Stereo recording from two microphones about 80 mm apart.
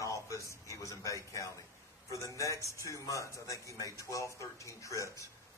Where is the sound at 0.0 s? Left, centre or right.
Left.